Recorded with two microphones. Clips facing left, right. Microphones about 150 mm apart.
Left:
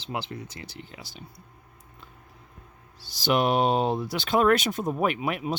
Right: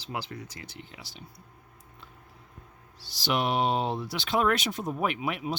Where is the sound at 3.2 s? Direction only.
45° left (ahead or behind).